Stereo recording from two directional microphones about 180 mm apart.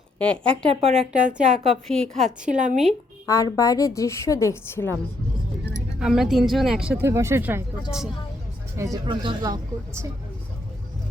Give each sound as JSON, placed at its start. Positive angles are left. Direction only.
{"t": 0.2, "sound": "a woman's voice", "side_deg": 5}
{"t": 0.7, "sound": "speech", "side_deg": -35}
{"t": 1.1, "sound": "speech", "side_deg": -5}
{"t": 2.5, "sound": "speech", "side_deg": -40}
{"t": 3.2, "sound": "a woman's voice", "side_deg": 20}
{"t": 6.0, "sound": "speech", "side_deg": -5}
{"t": 7.9, "sound": "speech", "side_deg": 0}
{"t": 9.0, "sound": "speech", "side_deg": -25}